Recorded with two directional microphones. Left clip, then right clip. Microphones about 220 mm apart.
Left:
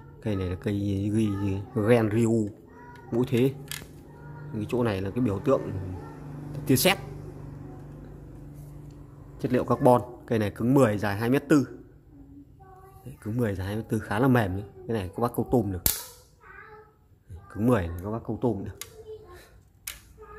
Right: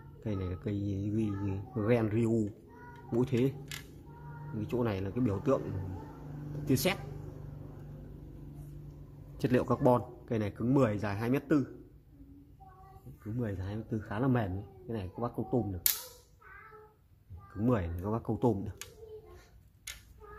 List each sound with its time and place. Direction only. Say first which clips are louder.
0.2 s speech: left 8 dB; 10° left (ahead or behind)
4.6 s speech: left 6 dB; 5° left (ahead or behind)
6.7 s speech: left 8 dB; 10° left (ahead or behind)
9.4 s speech: left 5 dB; 5° right (ahead or behind); by 11.6 s 10° left (ahead or behind)
13.4 s speech: left 10 dB; 15° left (ahead or behind)
17.6 s speech: left 7 dB; 5° left (ahead or behind)
18.0 s speech: left 2 dB; 10° right (ahead or behind)